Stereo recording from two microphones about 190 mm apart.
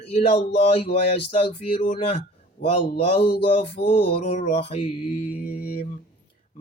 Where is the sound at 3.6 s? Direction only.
30° left (ahead or behind).